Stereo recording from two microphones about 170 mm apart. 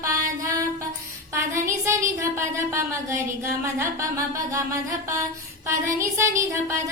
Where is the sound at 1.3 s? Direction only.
15° right (ahead or behind).